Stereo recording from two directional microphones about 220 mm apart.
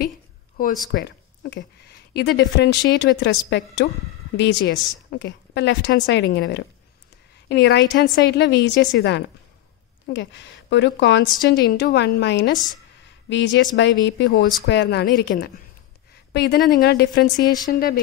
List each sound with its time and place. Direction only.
0.9 s a woman's voice: 55° left (ahead or behind)
14.7 s a woman's voice: 50° left (ahead or behind)
17.4 s speech: 15° left (ahead or behind)
17.6 s speech: 40° left (ahead or behind)